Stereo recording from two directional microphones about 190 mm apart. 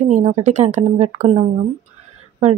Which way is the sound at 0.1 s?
35° right (ahead or behind).